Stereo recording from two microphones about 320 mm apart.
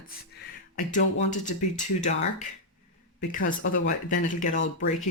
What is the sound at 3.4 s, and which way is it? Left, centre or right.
Speech, left.